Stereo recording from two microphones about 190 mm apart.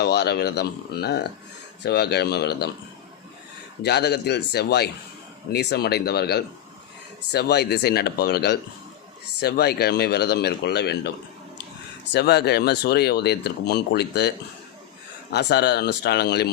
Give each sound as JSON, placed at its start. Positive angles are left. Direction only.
{"t": 0.0, "sound": "speech", "side_deg": 60}
{"t": 3.8, "sound": "speech", "side_deg": 60}
{"t": 12.1, "sound": "speech", "side_deg": 60}